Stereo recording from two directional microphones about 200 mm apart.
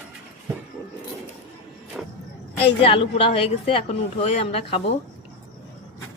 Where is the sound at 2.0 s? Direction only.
5° right (ahead or behind).